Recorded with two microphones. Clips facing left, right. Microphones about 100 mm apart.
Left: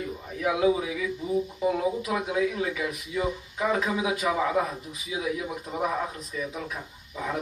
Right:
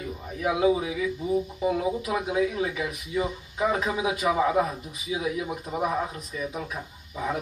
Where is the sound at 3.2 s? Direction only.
10° right (ahead or behind).